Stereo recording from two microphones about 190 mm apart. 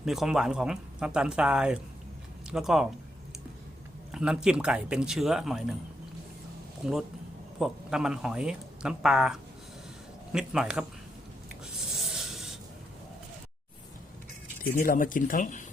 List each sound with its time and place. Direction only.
0.0 s speech: centre (ahead or behind)
4.1 s speech: 5° right (ahead or behind)
6.8 s speech: 5° right (ahead or behind)
12.1 s rub: centre (ahead or behind)
14.6 s speech: 45° left (ahead or behind)